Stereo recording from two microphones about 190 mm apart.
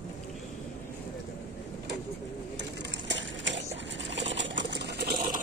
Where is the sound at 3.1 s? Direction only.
70° right (ahead or behind).